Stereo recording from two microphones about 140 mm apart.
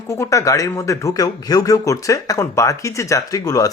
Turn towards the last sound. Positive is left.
turn(degrees=25)  # may be behind; listen again after turning